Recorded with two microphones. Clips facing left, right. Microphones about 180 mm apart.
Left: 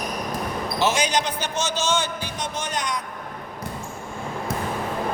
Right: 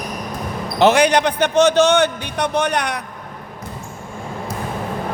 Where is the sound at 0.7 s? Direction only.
60° right (ahead or behind).